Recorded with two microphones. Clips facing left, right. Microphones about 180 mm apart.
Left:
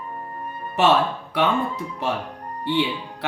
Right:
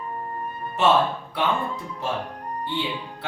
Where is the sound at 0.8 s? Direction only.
70° left (ahead or behind).